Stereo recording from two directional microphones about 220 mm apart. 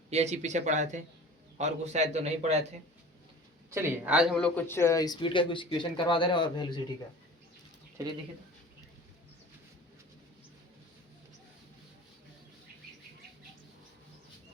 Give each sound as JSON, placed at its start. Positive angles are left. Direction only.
{"t": 0.1, "sound": "a man's voice", "side_deg": -30}
{"t": 3.7, "sound": "speech", "side_deg": -10}